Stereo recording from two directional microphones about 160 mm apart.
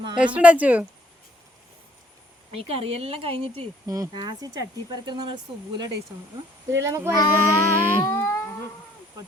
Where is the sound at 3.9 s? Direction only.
25° right (ahead or behind).